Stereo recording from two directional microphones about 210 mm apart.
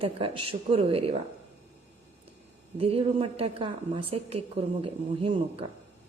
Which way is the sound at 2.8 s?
25° right (ahead or behind).